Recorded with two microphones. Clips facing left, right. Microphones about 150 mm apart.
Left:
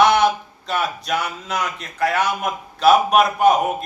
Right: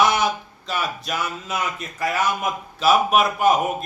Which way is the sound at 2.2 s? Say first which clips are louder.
Left 1 dB; centre (ahead or behind).